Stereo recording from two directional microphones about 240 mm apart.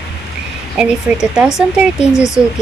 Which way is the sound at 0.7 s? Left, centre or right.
Centre.